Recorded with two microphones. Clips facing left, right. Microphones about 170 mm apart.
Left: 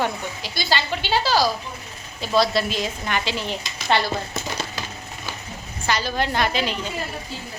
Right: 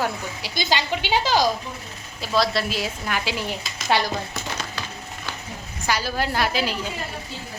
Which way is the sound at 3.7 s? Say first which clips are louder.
Even; 10° right (ahead or behind).